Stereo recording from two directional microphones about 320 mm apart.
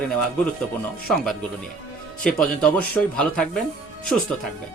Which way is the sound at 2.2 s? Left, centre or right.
Centre.